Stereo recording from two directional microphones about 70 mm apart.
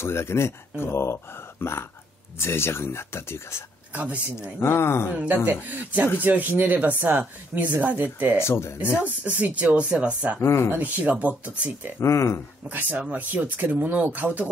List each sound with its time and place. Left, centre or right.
0.0 s speech: left
3.9 s speech: centre
4.4 s speech: left
5.1 s speech: centre
8.4 s speech: left
9.0 s speech: right
10.4 s speech: left
10.8 s speech: right
12.0 s speech: left
13.1 s speech: right